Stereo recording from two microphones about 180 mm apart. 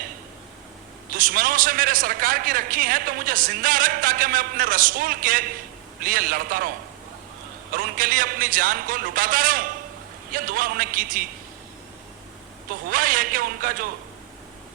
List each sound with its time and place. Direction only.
1.1 s a man's voice: 50° right (ahead or behind)
12.9 s a man's voice: 50° right (ahead or behind)